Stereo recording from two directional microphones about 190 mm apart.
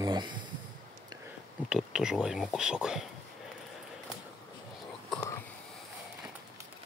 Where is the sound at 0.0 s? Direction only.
20° right (ahead or behind).